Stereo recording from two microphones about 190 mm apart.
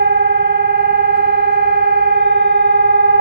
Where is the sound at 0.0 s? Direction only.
60° right (ahead or behind).